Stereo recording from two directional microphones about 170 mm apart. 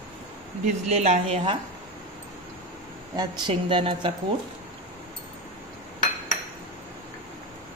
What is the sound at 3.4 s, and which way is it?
Speech, 30° right (ahead or behind).